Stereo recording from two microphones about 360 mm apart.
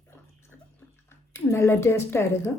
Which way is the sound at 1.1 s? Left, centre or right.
Centre.